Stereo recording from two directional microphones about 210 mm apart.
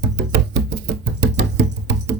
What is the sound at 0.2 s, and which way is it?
Music, 50° right (ahead or behind).